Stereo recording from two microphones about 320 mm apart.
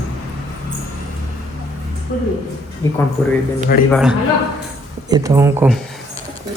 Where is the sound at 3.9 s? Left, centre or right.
Centre.